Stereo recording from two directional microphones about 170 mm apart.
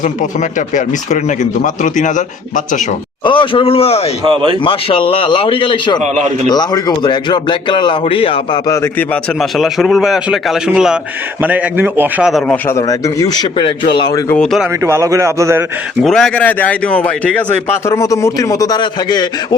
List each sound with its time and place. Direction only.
0.7 s speech: 45° left (ahead or behind)
3.2 s speech: 30° left (ahead or behind)
4.2 s speech: 30° right (ahead or behind)
4.6 s speech: 30° left (ahead or behind)
6.0 s speech: 45° right (ahead or behind)
6.5 s speech: 25° left (ahead or behind)
8.6 s speech: 15° left (ahead or behind)
9.4 s a man's voice: centre (ahead or behind)
12.5 s speech: 15° left (ahead or behind)
14.3 s a man's voice: 5° left (ahead or behind)
14.8 s a man's voice: 15° right (ahead or behind)
16.0 s speech: 5° left (ahead or behind); by 19.5 s 25° left (ahead or behind)